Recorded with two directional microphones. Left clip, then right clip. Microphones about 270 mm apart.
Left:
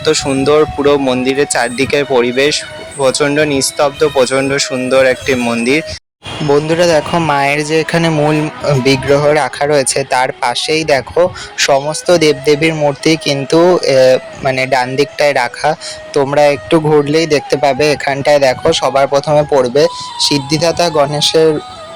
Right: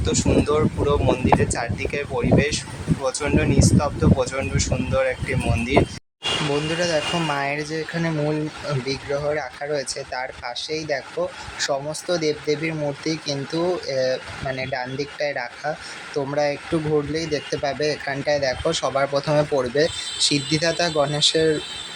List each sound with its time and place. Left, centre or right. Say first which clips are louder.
0.0 s speech: left 9 dB; left